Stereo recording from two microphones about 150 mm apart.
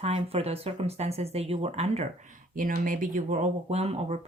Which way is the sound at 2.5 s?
65° right (ahead or behind).